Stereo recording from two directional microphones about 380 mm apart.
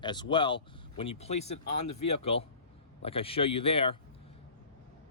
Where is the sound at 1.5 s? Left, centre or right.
Left.